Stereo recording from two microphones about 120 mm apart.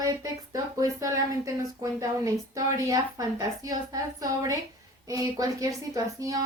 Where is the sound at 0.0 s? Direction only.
30° right (ahead or behind).